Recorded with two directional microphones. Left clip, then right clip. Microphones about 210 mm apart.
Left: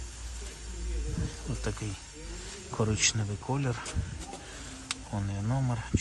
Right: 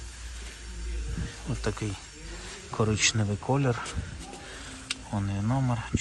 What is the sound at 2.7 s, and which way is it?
Speech, 10° left (ahead or behind).